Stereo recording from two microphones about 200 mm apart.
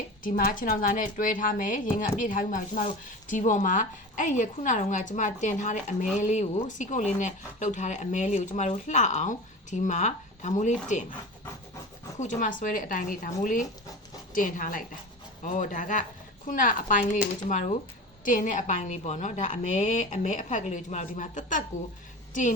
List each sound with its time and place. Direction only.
0.2 s speech: 45° left (ahead or behind)
12.2 s a woman's voice: 40° left (ahead or behind)